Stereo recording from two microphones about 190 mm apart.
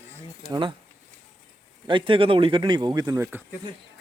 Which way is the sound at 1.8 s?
25° right (ahead or behind).